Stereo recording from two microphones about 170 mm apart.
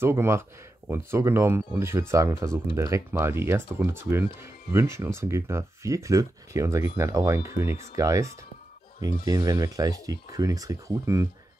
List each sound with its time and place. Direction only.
0.0 s speech: 15° right (ahead or behind)